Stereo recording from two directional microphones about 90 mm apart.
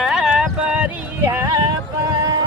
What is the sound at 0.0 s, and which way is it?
Music, 5° right (ahead or behind).